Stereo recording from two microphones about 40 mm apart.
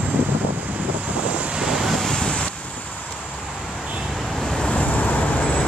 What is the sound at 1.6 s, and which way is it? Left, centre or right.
Vehicle, centre.